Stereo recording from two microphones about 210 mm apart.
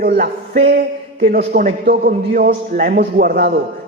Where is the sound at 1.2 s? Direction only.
45° right (ahead or behind).